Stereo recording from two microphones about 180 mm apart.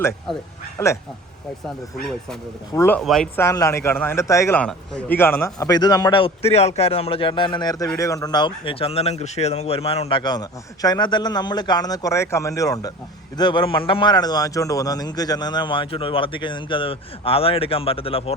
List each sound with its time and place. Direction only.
0.8 s speech: 15° left (ahead or behind)
2.7 s speech: 10° left (ahead or behind)
3.0 s speech: centre (ahead or behind)
3.3 s a man's voice: 15° left (ahead or behind)